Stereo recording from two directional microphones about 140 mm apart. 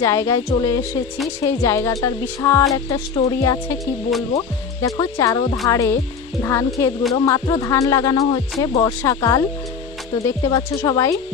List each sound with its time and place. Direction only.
0.0 s speech: 20° left (ahead or behind)